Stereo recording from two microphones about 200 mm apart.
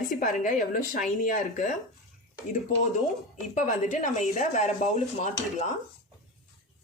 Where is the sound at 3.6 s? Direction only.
40° left (ahead or behind).